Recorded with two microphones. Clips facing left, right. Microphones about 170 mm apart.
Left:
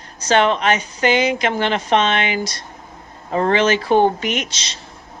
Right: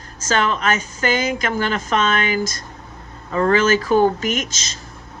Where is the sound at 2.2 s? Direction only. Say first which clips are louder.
Even; 45° right (ahead or behind).